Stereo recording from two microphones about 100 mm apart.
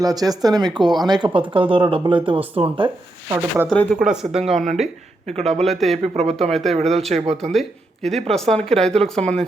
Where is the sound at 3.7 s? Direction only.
10° left (ahead or behind).